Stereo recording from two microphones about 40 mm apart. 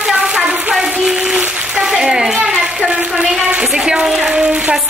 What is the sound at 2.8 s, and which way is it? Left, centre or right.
Speech, right.